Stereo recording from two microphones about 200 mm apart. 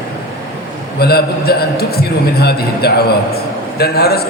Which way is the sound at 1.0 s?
50° left (ahead or behind).